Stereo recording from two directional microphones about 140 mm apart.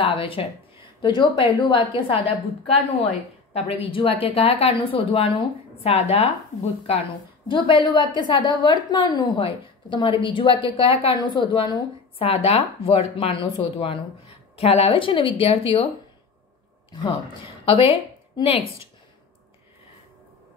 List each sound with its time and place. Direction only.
0.0 s a woman's voice: 40° left (ahead or behind)
7.6 s a woman's voice: 35° left (ahead or behind)
17.6 s a woman's voice: 40° left (ahead or behind)